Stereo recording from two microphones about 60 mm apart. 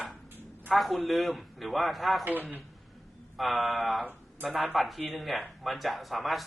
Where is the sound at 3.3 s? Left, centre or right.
Centre.